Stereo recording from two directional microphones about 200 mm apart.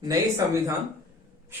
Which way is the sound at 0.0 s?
15° right (ahead or behind).